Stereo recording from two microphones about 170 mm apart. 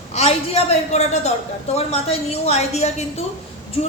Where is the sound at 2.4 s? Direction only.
40° left (ahead or behind).